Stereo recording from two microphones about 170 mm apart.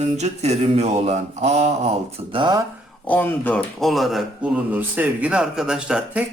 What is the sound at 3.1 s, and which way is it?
Speech, 10° left (ahead or behind).